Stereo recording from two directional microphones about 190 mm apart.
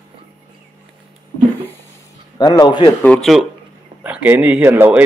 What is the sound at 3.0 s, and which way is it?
Speech, 5° left (ahead or behind).